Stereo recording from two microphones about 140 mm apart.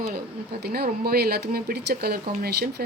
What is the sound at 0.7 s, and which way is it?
Speech, 90° right.